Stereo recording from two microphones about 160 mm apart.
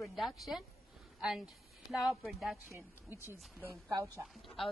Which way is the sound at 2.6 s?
15° right (ahead or behind).